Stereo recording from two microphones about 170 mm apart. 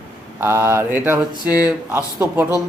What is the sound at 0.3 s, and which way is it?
Speech, 15° right (ahead or behind).